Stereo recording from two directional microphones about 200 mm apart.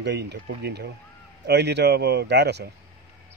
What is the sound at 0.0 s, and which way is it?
Speech, 55° right (ahead or behind).